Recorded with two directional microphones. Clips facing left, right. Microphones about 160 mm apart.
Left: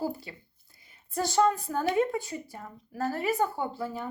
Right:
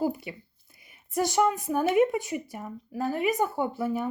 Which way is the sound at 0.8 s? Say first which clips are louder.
Right 4 dB; 20° right (ahead or behind).